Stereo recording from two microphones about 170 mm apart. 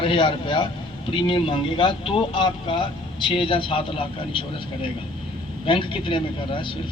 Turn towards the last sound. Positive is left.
turn(degrees=30)  # may be behind; listen again after turning